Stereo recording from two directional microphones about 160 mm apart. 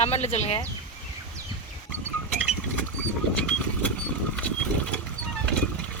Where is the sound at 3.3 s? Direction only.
5° left (ahead or behind).